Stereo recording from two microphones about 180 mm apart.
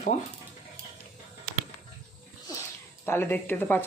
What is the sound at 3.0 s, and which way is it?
Speech, 10° left (ahead or behind).